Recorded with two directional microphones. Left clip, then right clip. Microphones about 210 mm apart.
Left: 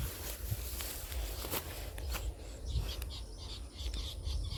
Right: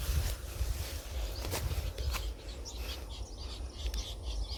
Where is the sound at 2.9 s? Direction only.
20° left (ahead or behind).